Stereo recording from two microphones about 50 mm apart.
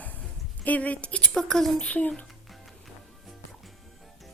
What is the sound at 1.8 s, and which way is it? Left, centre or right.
Speech, left.